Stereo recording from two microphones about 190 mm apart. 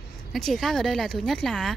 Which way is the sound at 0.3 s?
Centre (ahead or behind).